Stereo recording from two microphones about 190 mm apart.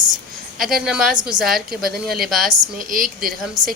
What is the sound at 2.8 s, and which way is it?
Speech, 45° right (ahead or behind).